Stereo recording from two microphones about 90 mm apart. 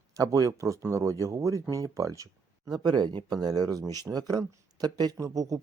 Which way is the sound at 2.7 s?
50° right (ahead or behind).